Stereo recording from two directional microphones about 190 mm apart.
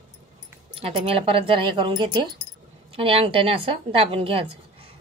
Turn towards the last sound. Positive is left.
turn(degrees=-30)  # may be behind; listen again after turning